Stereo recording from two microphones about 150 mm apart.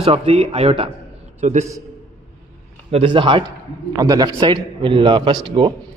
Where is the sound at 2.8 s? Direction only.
40° right (ahead or behind).